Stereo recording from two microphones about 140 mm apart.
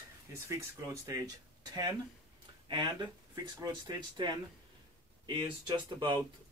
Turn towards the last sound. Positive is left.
turn(degrees=-30)  # may be behind; listen again after turning